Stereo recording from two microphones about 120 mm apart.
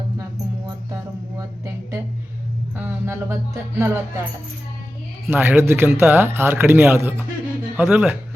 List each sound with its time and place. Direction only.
1.4 s a sound: 25° right (ahead or behind)
2.7 s music: 20° right (ahead or behind)
5.3 s a man's voice: 15° right (ahead or behind)